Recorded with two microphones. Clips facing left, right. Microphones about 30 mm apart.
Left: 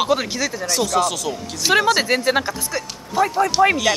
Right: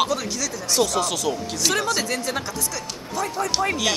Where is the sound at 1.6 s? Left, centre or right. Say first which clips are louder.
Left 6 dB; centre.